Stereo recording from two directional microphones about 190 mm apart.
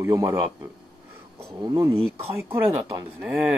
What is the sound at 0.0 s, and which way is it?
Speech, 15° right (ahead or behind).